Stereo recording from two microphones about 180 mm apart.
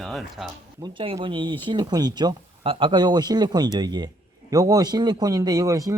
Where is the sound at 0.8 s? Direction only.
30° right (ahead or behind).